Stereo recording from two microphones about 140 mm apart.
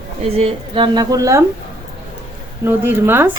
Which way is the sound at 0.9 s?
25° right (ahead or behind).